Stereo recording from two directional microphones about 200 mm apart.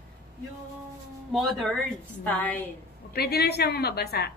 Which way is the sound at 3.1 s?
50° left (ahead or behind).